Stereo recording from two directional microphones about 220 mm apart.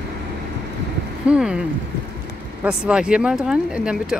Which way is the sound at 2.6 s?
5° right (ahead or behind).